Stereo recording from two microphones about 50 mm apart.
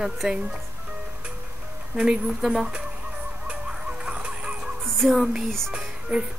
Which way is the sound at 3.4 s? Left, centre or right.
Centre.